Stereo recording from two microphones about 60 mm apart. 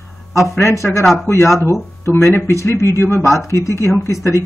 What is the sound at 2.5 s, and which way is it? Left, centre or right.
Speech, left.